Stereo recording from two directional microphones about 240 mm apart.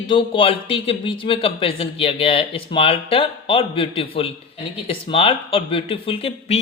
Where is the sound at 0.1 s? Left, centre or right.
Left.